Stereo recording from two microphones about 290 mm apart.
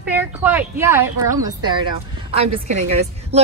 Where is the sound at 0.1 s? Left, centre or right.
Centre.